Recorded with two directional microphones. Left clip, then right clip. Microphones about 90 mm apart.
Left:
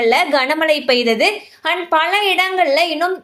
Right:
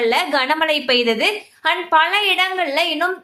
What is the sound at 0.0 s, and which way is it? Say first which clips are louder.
A woman's voice: left 3 dB; 25° left (ahead or behind).